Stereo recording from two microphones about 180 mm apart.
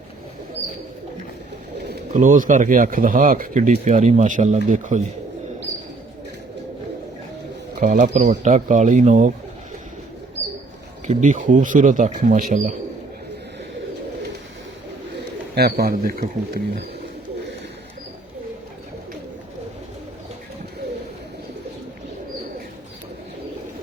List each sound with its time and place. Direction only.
2.1 s speech: 45° right (ahead or behind)
7.8 s speech: 45° right (ahead or behind)
11.0 s speech: 40° right (ahead or behind)
15.5 s speech: 60° right (ahead or behind)